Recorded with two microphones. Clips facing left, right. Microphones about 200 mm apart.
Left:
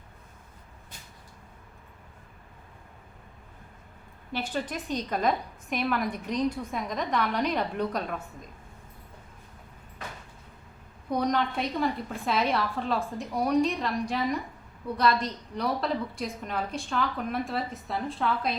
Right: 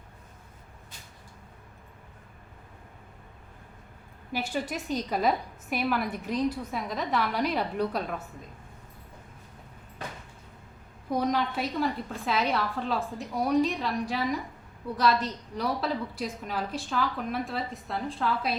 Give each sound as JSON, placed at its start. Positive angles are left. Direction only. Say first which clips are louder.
{"t": 4.3, "sound": "a woman's voice", "louder": "even", "side_deg": -10}
{"t": 11.1, "sound": "a woman's voice", "louder": "even", "side_deg": -5}